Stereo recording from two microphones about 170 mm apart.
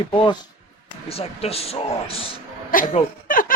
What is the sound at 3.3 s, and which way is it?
Giggle, 55° left (ahead or behind).